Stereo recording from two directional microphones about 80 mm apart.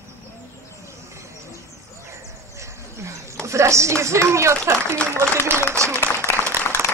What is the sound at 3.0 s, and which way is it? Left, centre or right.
Speech, right.